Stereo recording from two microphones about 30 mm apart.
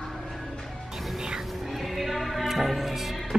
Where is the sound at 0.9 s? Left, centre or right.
Centre.